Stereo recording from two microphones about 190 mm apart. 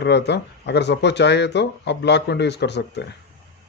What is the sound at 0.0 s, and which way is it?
Speech, 65° left (ahead or behind).